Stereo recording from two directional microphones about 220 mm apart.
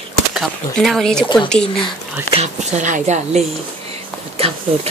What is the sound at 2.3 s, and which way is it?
Speech, 30° right (ahead or behind).